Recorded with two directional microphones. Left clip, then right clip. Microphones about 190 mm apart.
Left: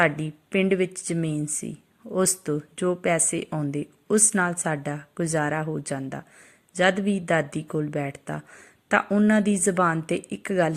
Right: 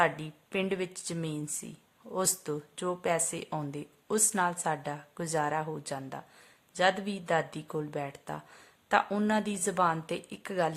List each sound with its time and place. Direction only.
0.0 s speech: 10° left (ahead or behind)